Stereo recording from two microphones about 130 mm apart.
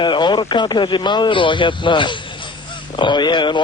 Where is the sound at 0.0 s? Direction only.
35° left (ahead or behind).